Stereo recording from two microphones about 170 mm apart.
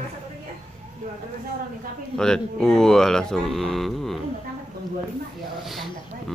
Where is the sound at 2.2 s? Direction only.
5° left (ahead or behind).